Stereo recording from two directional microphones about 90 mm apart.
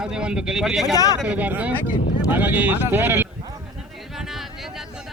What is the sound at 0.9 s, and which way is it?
Speech, 40° left (ahead or behind).